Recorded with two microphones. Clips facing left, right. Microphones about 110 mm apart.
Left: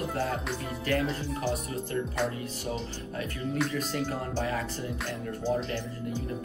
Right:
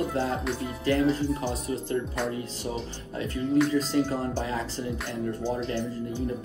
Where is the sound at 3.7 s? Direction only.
25° right (ahead or behind).